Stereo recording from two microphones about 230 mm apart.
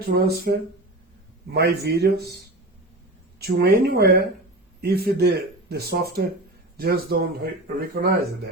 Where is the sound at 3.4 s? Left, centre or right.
Right.